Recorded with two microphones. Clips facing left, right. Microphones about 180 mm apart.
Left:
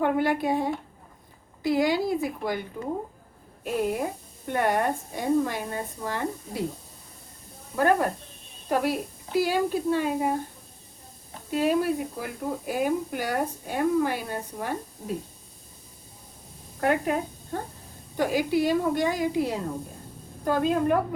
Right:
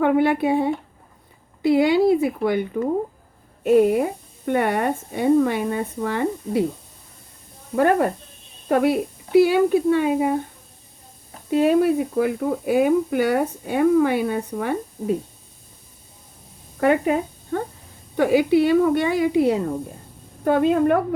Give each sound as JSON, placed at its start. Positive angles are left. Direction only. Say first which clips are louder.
{"t": 0.0, "sound": "speech", "louder": "right 6 dB", "side_deg": -65}
{"t": 8.7, "sound": "speech", "louder": "right 7 dB", "side_deg": -65}
{"t": 11.6, "sound": "speech", "louder": "right 6 dB", "side_deg": -65}
{"t": 16.8, "sound": "a woman's voice", "louder": "right 6 dB", "side_deg": -65}